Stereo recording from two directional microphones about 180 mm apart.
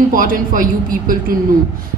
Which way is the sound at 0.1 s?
50° right (ahead or behind).